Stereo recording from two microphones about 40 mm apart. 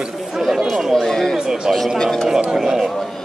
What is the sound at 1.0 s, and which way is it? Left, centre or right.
Speech, centre.